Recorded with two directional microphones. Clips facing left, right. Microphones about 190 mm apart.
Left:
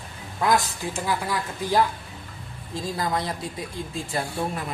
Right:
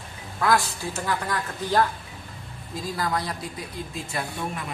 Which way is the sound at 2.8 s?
25° left (ahead or behind).